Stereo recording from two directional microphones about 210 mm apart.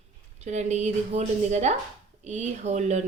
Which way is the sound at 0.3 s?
35° right (ahead or behind).